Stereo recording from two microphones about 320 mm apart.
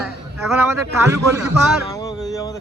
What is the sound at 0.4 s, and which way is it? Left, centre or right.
Speech, centre.